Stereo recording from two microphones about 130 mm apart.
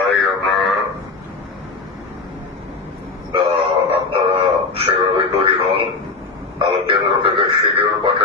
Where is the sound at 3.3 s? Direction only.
45° right (ahead or behind).